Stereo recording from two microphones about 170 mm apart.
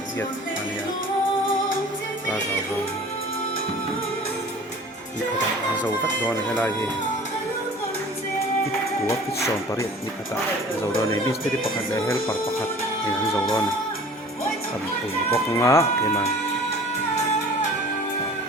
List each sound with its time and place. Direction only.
6.2 s speech: 10° left (ahead or behind)
9.0 s speech: 15° left (ahead or behind)
15.3 s speech: 15° left (ahead or behind)